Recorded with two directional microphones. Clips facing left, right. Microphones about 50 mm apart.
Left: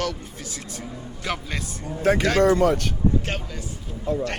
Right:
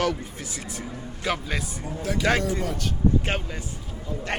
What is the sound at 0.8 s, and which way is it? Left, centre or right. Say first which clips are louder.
A man's voice: right 1 dB; centre.